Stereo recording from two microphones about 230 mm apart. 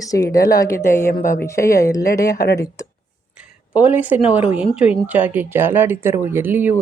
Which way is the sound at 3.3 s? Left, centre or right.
Centre.